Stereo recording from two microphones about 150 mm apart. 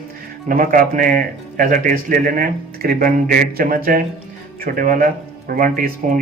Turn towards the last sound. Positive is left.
turn(degrees=-70)  # may be behind; listen again after turning